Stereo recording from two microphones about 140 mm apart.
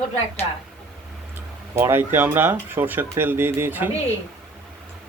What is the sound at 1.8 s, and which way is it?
Speech, 15° right (ahead or behind).